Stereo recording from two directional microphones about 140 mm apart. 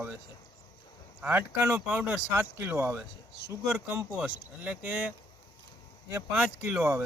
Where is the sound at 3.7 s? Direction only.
5° right (ahead or behind).